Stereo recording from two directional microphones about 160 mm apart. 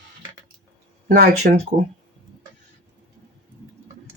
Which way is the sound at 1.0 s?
65° right (ahead or behind).